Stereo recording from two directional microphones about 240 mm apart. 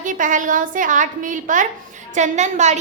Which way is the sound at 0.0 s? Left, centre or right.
Right.